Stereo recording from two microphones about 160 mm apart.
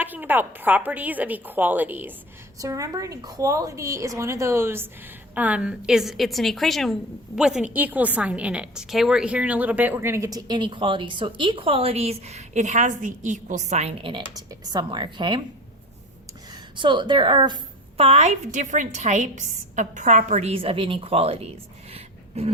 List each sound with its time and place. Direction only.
0.0 s a woman's voice: 10° right (ahead or behind); by 15.4 s 30° right (ahead or behind)
16.5 s a woman's voice: 30° right (ahead or behind)
21.9 s a sound: 40° right (ahead or behind)